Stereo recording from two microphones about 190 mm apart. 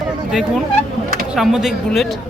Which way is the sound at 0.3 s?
Centre (ahead or behind).